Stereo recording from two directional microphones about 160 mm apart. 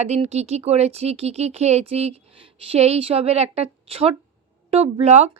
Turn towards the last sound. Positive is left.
turn(degrees=-45)  # may be behind; listen again after turning